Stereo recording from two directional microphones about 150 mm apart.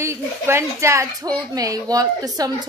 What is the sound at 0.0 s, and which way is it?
Speech, 20° right (ahead or behind).